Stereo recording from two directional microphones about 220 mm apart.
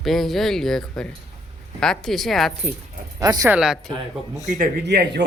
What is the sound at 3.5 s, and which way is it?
Speech, 5° right (ahead or behind).